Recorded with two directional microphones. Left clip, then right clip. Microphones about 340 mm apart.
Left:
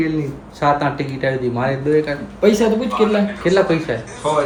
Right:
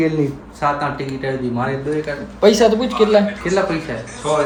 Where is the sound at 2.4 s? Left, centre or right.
Centre.